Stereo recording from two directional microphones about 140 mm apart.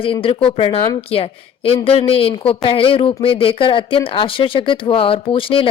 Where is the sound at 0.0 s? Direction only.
40° left (ahead or behind).